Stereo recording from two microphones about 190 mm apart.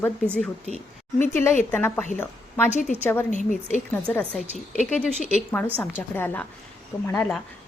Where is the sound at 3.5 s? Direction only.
40° left (ahead or behind).